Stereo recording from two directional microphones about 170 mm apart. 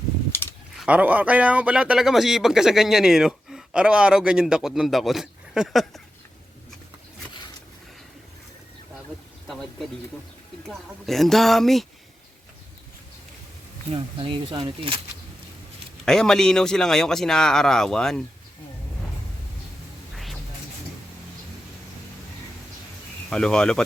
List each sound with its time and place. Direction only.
0.8 s speech: 10° right (ahead or behind)
9.5 s speech: centre (ahead or behind)
13.9 s speech: 30° right (ahead or behind)
16.0 s speech: 5° left (ahead or behind)
23.3 s speech: 5° left (ahead or behind)